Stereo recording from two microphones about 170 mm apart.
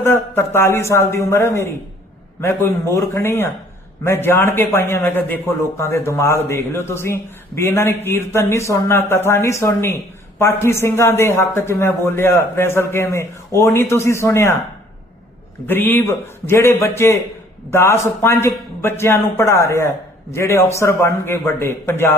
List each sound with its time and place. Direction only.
0.0 s a man's voice: 15° left (ahead or behind)
15.6 s a man's voice: 10° left (ahead or behind)